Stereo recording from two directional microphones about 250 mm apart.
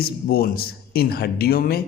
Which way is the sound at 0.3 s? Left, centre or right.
Left.